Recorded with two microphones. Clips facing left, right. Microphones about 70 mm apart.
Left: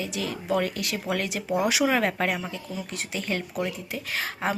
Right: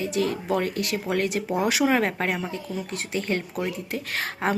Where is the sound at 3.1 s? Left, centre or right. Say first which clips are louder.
Right 2 dB; right.